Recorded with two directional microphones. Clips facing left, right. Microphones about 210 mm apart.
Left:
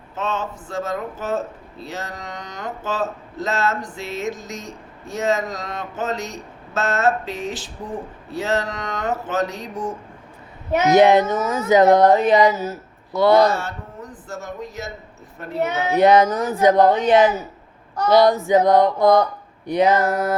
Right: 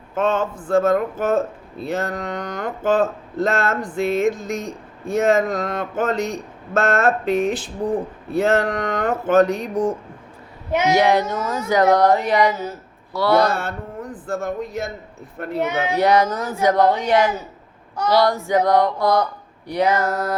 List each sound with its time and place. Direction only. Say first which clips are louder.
0.1 s speech: right 6 dB; 55° right (ahead or behind)
10.9 s speech: left 6 dB; 20° left (ahead or behind)
13.5 s speech: right 1 dB; 55° right (ahead or behind)
16.0 s speech: left 4 dB; 20° left (ahead or behind)